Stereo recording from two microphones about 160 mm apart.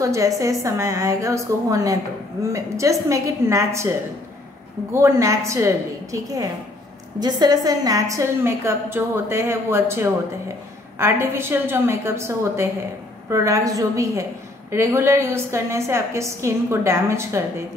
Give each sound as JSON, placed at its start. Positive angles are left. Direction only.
{"t": 0.0, "sound": "a woman's voice", "side_deg": -20}
{"t": 4.9, "sound": "a woman's voice", "side_deg": -15}